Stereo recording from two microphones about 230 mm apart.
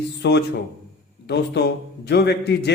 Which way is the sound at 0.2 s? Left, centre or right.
Left.